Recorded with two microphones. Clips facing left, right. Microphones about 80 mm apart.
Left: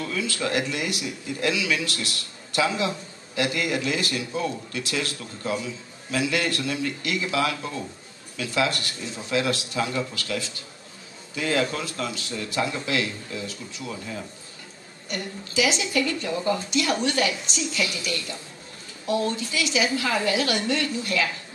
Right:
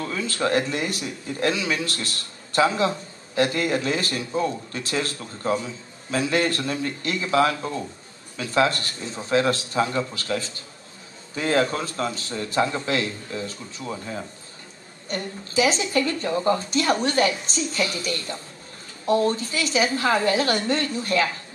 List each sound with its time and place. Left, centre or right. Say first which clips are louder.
0.0 s a man's voice: right 2 dB; right